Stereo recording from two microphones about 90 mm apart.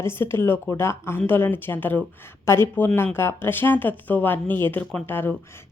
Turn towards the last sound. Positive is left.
turn(degrees=25)  # may be behind; listen again after turning